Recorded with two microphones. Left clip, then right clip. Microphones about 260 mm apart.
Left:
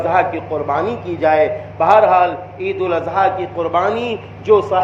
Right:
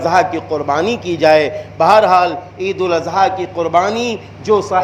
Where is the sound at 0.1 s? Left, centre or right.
Right.